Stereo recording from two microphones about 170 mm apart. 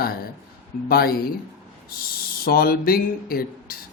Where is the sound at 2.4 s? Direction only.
65° left (ahead or behind).